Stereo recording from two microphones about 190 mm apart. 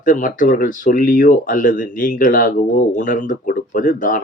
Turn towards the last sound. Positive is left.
turn(degrees=45)  # may be behind; listen again after turning